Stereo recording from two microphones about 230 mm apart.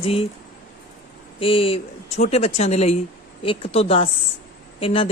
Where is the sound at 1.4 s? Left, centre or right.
Left.